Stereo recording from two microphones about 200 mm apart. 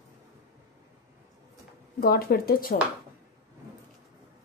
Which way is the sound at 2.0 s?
50° left (ahead or behind).